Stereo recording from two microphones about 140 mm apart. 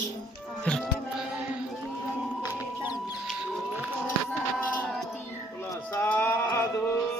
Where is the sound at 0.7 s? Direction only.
10° left (ahead or behind).